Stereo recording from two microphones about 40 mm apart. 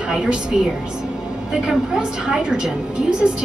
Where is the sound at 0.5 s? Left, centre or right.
Right.